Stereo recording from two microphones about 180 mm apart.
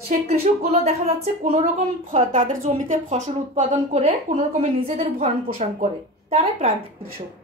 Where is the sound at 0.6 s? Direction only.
35° right (ahead or behind).